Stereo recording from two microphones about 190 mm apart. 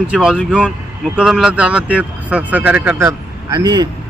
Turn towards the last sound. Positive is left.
turn(degrees=-20)  # may be behind; listen again after turning